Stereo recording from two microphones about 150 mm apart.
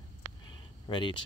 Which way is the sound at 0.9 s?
35° left (ahead or behind).